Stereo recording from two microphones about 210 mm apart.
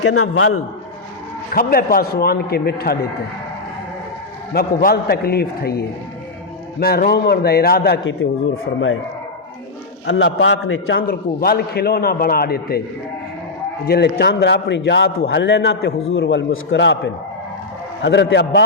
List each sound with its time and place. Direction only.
0.0 s a man's voice: 80° left
1.5 s a man's voice: 45° left (ahead or behind)
4.5 s a man's voice: 45° left (ahead or behind)
8.2 s a man's voice: 65° left (ahead or behind)
10.1 s a man's voice: 60° left (ahead or behind)
11.0 s a man's voice: 45° left (ahead or behind)
13.8 s a man's voice: 50° left (ahead or behind)
16.1 s a man's voice: 65° left (ahead or behind)